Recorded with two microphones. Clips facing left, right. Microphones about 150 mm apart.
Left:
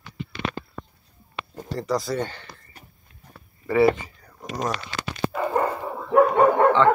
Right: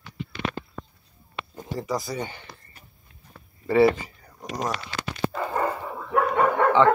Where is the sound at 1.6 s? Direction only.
Centre (ahead or behind).